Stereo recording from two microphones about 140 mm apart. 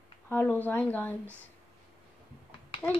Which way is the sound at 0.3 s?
10° left (ahead or behind).